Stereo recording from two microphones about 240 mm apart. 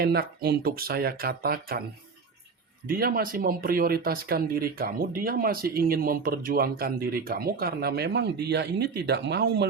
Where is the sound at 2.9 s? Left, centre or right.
Right.